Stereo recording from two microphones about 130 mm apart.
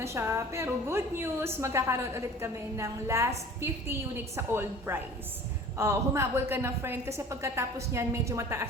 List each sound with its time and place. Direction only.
0.0 s a woman's voice: 20° right (ahead or behind)